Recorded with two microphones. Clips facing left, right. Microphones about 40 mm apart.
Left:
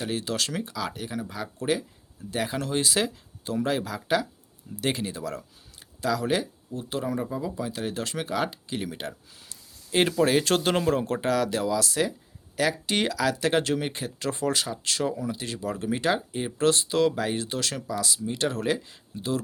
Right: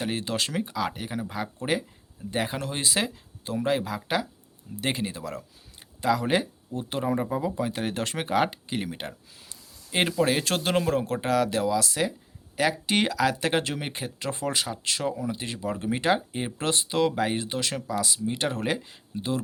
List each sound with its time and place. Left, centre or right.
0.0 s speech: centre
2.3 s speech: centre
6.0 s speech: right; by 12.1 s centre
12.5 s speech: centre